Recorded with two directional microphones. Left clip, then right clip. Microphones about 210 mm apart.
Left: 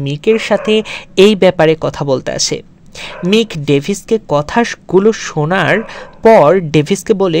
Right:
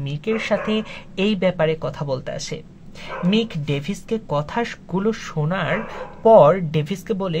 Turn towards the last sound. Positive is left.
turn(degrees=45)  # may be behind; listen again after turning